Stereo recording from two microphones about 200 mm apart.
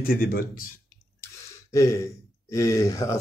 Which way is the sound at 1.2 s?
15° left (ahead or behind).